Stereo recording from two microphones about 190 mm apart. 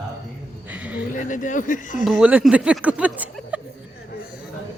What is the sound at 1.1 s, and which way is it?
Speech, 45° left (ahead or behind).